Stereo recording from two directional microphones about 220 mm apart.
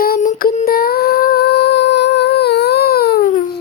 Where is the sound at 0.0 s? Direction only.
40° left (ahead or behind).